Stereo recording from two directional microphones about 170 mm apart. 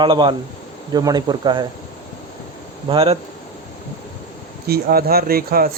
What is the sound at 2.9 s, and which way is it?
Speech, 35° right (ahead or behind).